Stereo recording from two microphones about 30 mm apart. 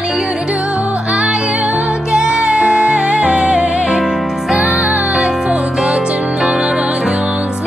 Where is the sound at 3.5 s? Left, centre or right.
Right.